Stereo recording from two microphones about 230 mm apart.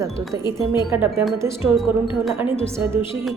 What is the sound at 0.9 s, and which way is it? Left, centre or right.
A woman's voice, centre.